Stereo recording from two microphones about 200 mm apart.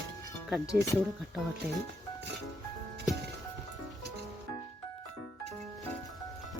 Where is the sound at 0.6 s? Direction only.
15° left (ahead or behind).